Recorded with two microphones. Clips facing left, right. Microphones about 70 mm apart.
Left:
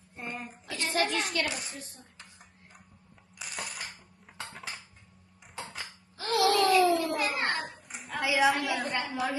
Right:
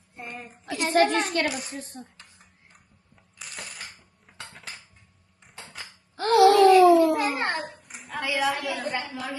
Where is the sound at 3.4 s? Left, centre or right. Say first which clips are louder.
Left 2 dB; centre.